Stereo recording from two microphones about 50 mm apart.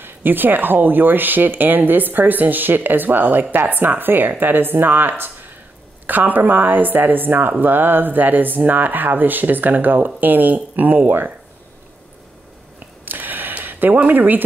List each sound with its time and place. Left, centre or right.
0.0 s speech: right
13.0 s a sound: right
13.9 s speech: right